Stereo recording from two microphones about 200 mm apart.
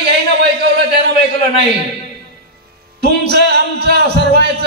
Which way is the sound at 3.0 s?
55° right (ahead or behind).